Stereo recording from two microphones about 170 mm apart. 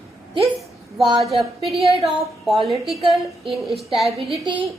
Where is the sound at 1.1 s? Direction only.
Centre (ahead or behind).